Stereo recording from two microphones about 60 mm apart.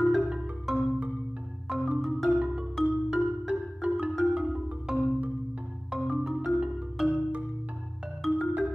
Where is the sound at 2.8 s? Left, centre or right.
Centre.